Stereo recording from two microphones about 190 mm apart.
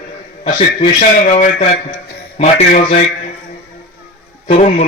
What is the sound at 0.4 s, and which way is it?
A man's voice, 35° left (ahead or behind).